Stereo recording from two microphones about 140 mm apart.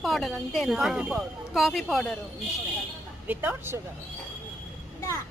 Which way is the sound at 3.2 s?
15° right (ahead or behind).